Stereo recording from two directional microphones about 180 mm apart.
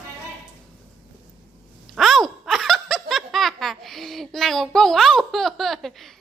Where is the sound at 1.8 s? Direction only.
Centre (ahead or behind).